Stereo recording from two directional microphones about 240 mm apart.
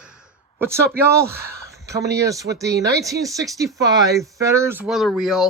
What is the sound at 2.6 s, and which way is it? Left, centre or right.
Speech, right.